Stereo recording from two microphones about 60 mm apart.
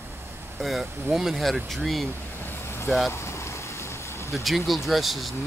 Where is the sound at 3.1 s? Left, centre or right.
Left.